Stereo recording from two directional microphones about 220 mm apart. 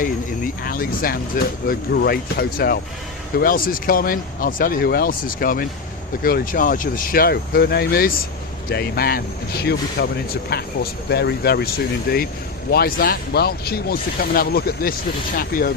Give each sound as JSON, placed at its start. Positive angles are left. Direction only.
{"t": 0.0, "sound": "speech", "side_deg": 40}